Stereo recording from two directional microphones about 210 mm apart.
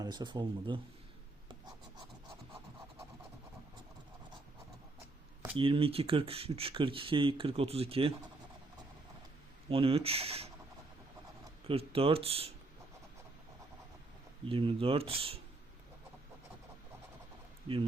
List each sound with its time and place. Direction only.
0.0 s speech: 20° right (ahead or behind)
5.5 s speech: 25° right (ahead or behind)
9.6 s speech: 25° right (ahead or behind)
11.7 s speech: 25° right (ahead or behind)
14.5 s speech: 25° right (ahead or behind)